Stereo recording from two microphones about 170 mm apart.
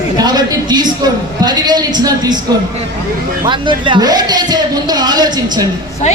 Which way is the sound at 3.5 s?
30° right (ahead or behind).